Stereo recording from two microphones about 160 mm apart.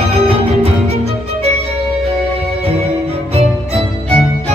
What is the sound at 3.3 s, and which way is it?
Music, 40° right (ahead or behind).